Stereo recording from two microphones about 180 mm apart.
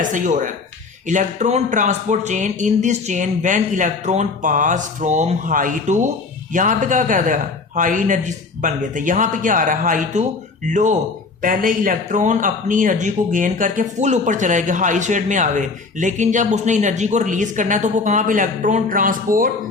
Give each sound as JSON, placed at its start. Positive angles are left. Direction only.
{"t": 0.0, "sound": "speech", "side_deg": -45}